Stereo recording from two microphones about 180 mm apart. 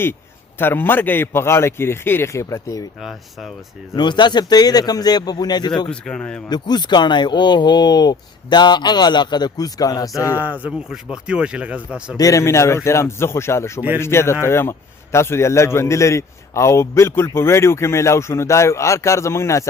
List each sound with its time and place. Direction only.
0.6 s a man's voice: 10° left (ahead or behind)
3.0 s speech: centre (ahead or behind)
3.9 s speech: 25° left (ahead or behind)
5.9 s speech: 5° left (ahead or behind)
6.5 s speech: 25° left (ahead or behind)
10.3 s speech: 10° right (ahead or behind)
12.1 s a man's voice: 20° left (ahead or behind)